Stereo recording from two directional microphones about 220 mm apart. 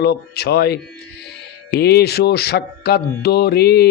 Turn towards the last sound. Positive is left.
turn(degrees=45)  # may be behind; listen again after turning